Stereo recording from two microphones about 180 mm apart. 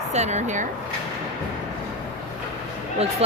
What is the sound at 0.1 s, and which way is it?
Speech, 40° right (ahead or behind).